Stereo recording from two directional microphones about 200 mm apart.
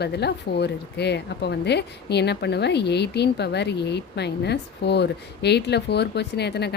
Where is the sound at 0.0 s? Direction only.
55° left (ahead or behind).